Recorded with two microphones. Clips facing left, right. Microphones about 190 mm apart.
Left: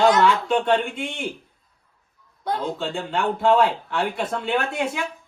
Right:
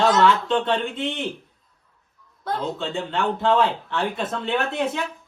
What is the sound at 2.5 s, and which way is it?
Speech, centre (ahead or behind).